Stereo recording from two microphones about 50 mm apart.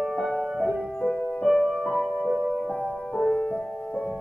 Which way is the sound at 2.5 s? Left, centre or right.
Left.